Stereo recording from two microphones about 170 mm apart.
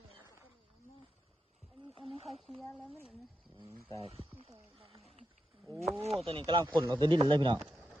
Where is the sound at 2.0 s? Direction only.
Centre (ahead or behind).